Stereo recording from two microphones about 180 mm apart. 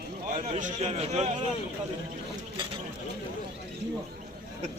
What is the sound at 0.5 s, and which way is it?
Speech, 40° right (ahead or behind).